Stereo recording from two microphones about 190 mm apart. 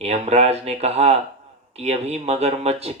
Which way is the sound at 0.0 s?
35° right (ahead or behind).